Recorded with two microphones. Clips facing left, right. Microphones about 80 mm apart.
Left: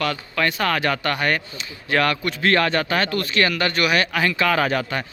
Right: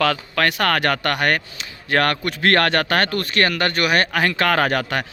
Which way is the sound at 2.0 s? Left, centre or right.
Right.